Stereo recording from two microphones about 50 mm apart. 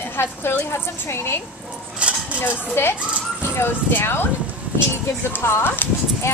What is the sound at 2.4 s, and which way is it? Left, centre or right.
Speech, left.